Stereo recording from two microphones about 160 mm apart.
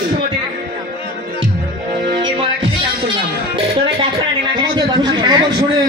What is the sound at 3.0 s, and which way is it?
Music, 35° right (ahead or behind).